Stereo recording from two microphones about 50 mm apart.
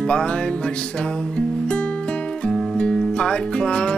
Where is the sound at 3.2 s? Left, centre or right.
Centre.